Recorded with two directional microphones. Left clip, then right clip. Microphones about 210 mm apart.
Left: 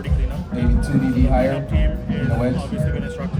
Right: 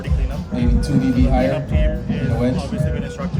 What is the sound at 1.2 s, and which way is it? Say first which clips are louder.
Speech: right 1 dB; centre (ahead or behind).